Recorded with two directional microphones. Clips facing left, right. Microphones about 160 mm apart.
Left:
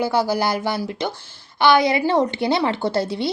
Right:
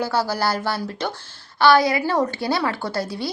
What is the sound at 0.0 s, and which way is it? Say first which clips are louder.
A woman's voice: left 2 dB; 10° left (ahead or behind).